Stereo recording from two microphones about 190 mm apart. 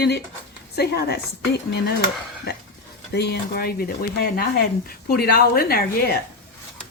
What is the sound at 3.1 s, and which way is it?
Speech, 55° left (ahead or behind).